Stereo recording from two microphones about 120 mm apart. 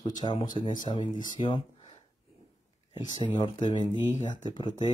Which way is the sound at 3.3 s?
35° left (ahead or behind).